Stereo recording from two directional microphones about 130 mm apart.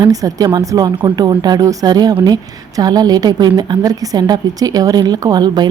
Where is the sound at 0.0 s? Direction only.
25° right (ahead or behind).